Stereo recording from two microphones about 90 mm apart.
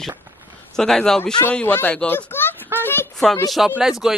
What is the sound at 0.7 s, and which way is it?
Speech, 5° left (ahead or behind).